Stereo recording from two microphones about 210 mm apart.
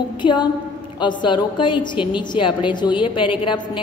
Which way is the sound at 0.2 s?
20° left (ahead or behind).